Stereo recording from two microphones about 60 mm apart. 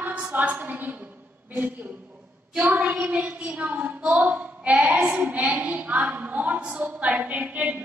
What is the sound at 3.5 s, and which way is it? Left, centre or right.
A woman's voice, right.